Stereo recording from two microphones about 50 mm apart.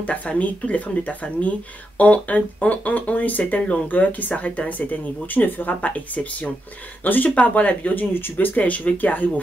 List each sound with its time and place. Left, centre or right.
0.0 s speech: left